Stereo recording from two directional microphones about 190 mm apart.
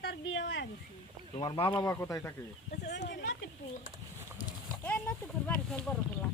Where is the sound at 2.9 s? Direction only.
65° left (ahead or behind).